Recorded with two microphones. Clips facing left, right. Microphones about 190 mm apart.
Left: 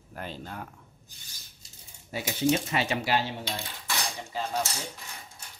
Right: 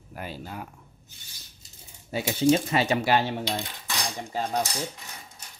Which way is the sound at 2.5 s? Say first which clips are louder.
Right 5 dB; 40° right (ahead or behind).